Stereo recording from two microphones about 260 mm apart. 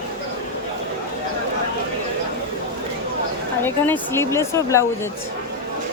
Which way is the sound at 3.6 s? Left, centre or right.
Centre.